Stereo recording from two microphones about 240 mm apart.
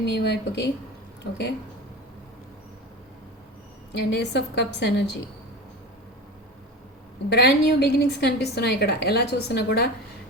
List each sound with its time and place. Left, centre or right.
0.0 s a woman's voice: left
3.9 s a woman's voice: left
7.3 s a woman's voice: left